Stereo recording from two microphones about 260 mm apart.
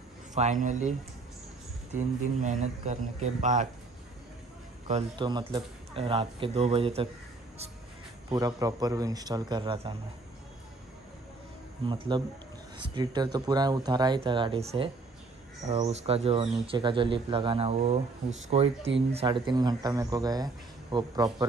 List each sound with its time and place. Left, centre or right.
0.3 s speech: right
2.0 s speech: right
4.8 s speech: right
8.3 s speech: centre
12.1 s speech: centre